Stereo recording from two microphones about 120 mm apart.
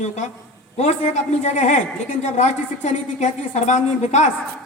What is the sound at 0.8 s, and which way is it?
A woman's voice, 75° left (ahead or behind).